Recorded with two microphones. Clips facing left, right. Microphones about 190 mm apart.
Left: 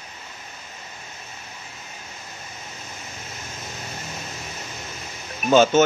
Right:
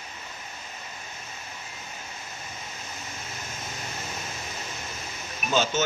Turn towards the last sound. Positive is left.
turn(degrees=55)  # may be behind; listen again after turning